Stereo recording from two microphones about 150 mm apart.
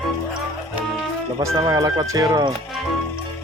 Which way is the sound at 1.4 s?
25° right (ahead or behind).